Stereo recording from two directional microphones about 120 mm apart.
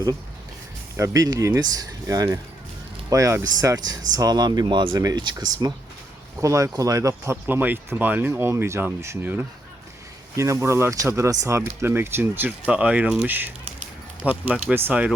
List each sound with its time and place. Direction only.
0.9 s speech: 25° right (ahead or behind)